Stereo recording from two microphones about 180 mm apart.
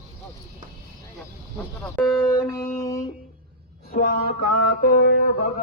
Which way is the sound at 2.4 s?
20° left (ahead or behind).